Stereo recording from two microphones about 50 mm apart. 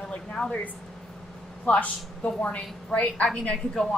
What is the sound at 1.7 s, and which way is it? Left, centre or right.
A woman's voice, left.